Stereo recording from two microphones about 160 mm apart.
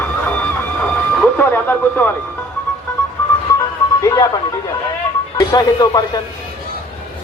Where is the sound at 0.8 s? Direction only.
10° left (ahead or behind).